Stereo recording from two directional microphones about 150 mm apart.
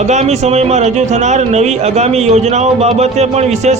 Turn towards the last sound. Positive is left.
turn(degrees=-45)  # may be behind; listen again after turning